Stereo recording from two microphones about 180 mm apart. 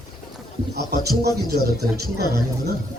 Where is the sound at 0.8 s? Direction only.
60° right (ahead or behind).